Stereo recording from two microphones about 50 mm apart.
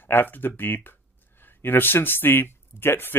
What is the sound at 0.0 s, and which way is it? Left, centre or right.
Speech, left.